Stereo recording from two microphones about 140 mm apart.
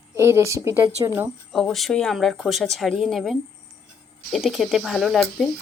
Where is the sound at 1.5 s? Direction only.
Centre (ahead or behind).